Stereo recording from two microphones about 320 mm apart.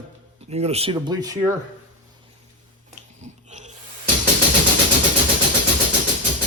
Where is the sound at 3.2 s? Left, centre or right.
Right.